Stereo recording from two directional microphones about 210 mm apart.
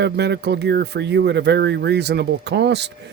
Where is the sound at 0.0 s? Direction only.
50° right (ahead or behind).